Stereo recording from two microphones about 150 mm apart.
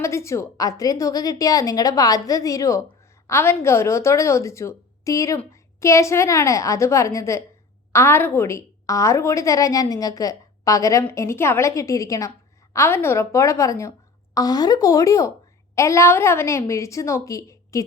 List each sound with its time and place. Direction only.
0.0 s a woman's voice: 20° left (ahead or behind)